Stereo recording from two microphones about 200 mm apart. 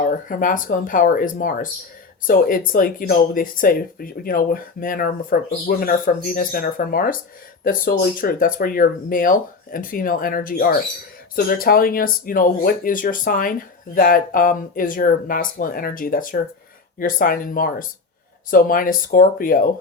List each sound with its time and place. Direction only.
0.0 s speech: 45° left (ahead or behind)